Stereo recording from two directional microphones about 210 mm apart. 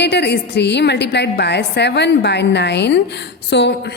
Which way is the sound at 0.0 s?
55° left (ahead or behind).